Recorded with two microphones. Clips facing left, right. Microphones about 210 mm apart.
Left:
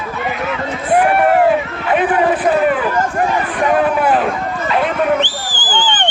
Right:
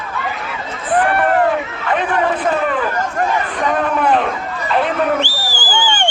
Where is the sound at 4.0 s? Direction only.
5° left (ahead or behind).